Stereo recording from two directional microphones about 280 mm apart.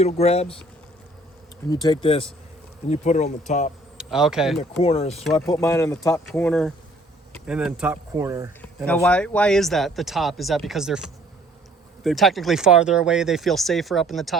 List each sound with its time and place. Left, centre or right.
0.0 s speech: left
1.7 s speech: centre
3.9 s speech: centre
4.8 s speech: left
5.5 s speech: centre
8.9 s speech: centre